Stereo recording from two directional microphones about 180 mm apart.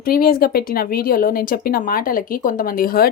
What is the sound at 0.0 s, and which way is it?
Speech, 55° left (ahead or behind).